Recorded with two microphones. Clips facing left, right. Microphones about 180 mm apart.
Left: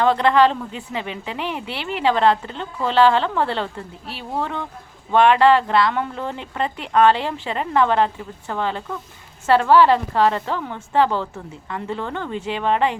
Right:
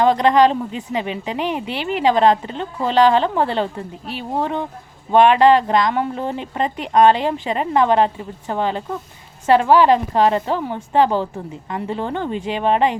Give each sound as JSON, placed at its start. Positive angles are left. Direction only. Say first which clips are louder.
{"t": 0.0, "sound": "a woman's voice", "louder": "right 2 dB", "side_deg": -15}